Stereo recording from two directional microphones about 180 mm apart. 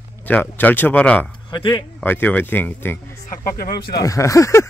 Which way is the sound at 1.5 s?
25° left (ahead or behind).